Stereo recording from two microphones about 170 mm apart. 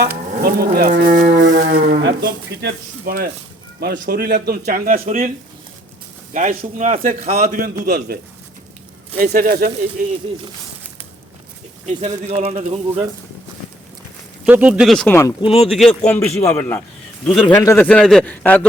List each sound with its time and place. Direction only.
0.4 s speech: 65° right (ahead or behind)
2.0 s speech: 85° right; by 3.2 s 60° right (ahead or behind)
3.8 s speech: 80° right
4.4 s speech: 65° right (ahead or behind)
6.3 s a man's voice: 50° right (ahead or behind)
11.9 s a man's voice: 40° right (ahead or behind)
14.4 s a man's voice: 10° right (ahead or behind)
15.4 s speech: 35° left (ahead or behind)
15.7 s a man's voice: centre (ahead or behind)
16.0 s a man's voice: 15° left (ahead or behind)
17.6 s speech: 20° left (ahead or behind)
17.8 s a man's voice: 5° left (ahead or behind)